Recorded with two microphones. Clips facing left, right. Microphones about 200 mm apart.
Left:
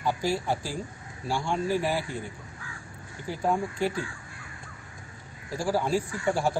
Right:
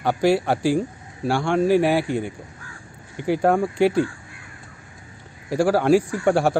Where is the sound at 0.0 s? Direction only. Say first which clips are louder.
Right 9 dB; 70° right (ahead or behind).